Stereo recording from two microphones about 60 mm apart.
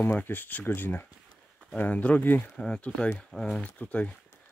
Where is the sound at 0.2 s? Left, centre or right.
Left.